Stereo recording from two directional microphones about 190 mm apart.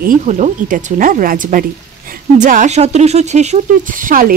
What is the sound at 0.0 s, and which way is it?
Speech, 45° right (ahead or behind).